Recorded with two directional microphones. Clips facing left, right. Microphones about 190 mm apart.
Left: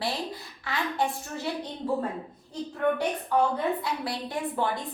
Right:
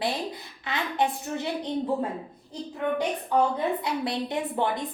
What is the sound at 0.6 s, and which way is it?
Speech, 20° right (ahead or behind).